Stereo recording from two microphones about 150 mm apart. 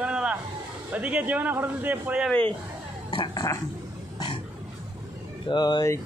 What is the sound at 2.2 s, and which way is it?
Speech, 10° left (ahead or behind).